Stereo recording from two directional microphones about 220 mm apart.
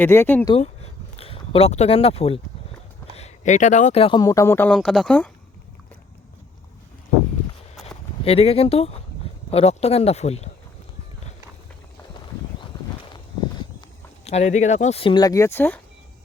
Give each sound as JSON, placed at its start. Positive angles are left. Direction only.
{"t": 0.0, "sound": "a man's voice", "side_deg": 10}
{"t": 0.5, "sound": "a sound", "side_deg": 25}
{"t": 3.2, "sound": "a man's voice", "side_deg": 30}
{"t": 8.2, "sound": "speech", "side_deg": 25}
{"t": 14.3, "sound": "speech", "side_deg": 30}